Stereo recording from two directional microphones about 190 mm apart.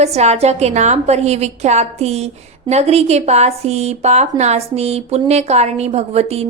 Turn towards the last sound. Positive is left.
turn(degrees=-35)  # may be behind; listen again after turning